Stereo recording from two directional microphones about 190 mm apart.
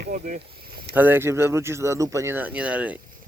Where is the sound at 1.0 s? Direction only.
10° right (ahead or behind).